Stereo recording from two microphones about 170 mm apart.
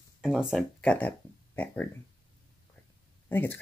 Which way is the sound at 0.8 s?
10° left (ahead or behind).